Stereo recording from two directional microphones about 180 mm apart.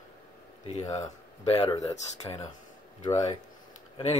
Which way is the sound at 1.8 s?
20° left (ahead or behind).